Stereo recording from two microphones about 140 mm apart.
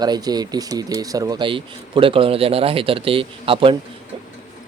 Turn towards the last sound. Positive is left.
turn(degrees=-40)  # may be behind; listen again after turning